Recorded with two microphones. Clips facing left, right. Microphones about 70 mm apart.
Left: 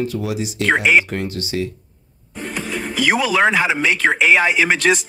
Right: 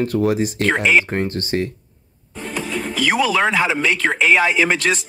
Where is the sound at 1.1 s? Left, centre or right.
Right.